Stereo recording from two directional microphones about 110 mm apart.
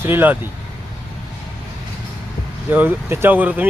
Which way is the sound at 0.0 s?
20° right (ahead or behind).